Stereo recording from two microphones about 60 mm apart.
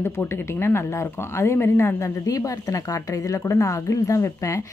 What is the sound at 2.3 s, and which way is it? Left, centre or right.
A woman's voice, left.